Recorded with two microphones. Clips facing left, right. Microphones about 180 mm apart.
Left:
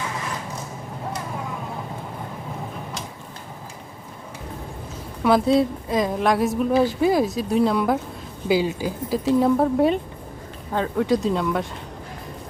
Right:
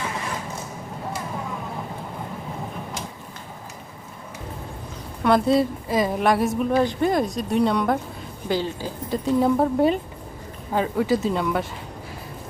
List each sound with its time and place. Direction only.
5.2 s a woman's voice: centre (ahead or behind)